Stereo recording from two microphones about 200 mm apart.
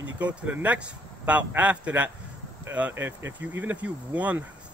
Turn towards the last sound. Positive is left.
turn(degrees=-5)  # may be behind; listen again after turning